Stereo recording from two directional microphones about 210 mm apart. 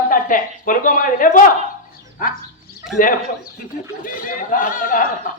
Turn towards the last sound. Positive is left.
turn(degrees=40)  # may be behind; listen again after turning